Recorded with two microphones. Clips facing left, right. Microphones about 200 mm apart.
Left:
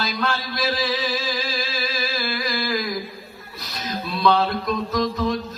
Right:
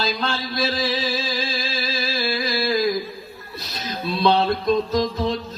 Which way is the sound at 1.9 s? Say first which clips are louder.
Right 2 dB; 25° right (ahead or behind).